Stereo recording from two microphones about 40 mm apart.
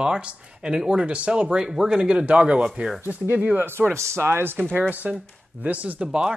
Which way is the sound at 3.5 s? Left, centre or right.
Right.